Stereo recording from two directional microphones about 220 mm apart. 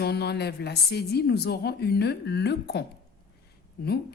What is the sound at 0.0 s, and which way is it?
A woman's voice, 45° left (ahead or behind).